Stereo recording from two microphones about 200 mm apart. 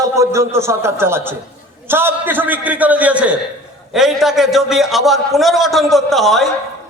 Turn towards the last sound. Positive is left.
turn(degrees=0)  # may be behind; listen again after turning